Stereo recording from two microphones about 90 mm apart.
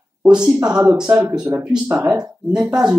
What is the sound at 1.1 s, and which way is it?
Speech, 30° right (ahead or behind).